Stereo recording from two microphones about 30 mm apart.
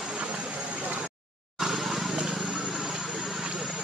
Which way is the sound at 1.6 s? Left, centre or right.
Centre.